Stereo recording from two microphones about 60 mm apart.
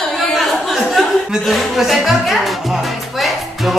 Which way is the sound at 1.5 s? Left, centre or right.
Centre.